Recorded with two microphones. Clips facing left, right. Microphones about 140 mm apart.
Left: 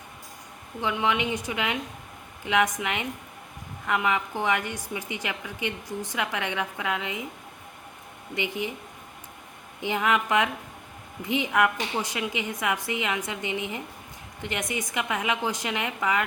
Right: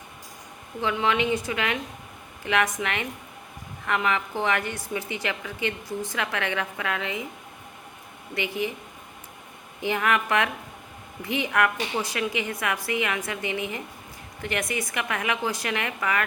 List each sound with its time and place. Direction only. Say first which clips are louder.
0.8 s a woman's voice: right 2 dB; 15° left (ahead or behind)
8.4 s a woman's voice: right 2 dB; 15° left (ahead or behind)
9.8 s a woman's voice: even; 15° left (ahead or behind)